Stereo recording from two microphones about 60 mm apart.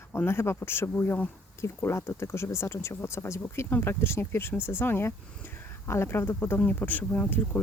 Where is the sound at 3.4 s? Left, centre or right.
Left.